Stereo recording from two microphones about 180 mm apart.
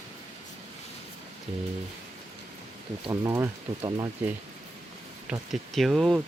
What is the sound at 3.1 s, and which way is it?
Speech, 15° right (ahead or behind).